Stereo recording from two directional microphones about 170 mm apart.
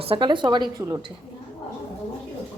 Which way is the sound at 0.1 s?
30° right (ahead or behind).